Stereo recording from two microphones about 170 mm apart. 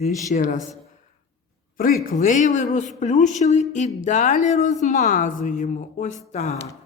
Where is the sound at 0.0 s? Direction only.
45° left (ahead or behind).